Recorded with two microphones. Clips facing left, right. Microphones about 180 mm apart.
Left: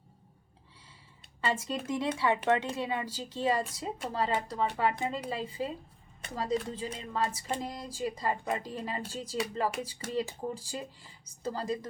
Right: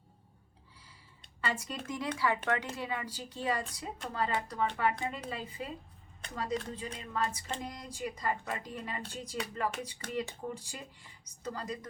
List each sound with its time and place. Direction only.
1.4 s speech: 25° left (ahead or behind)